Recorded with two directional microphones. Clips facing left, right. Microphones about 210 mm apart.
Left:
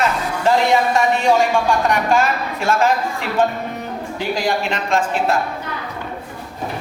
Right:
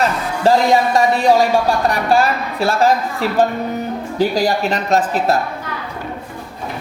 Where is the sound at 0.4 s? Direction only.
35° right (ahead or behind).